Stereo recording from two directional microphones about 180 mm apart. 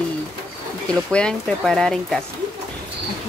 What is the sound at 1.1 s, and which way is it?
Speech, 5° left (ahead or behind).